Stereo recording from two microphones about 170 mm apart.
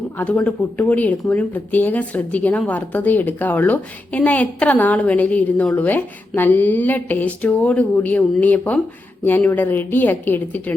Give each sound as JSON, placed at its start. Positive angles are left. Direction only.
{"t": 0.2, "sound": "speech", "side_deg": 10}